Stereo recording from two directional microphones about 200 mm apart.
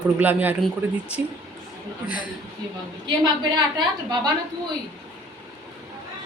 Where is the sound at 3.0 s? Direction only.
20° right (ahead or behind).